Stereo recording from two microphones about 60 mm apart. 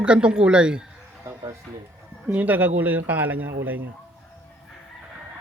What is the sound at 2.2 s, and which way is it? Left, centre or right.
Speech, right.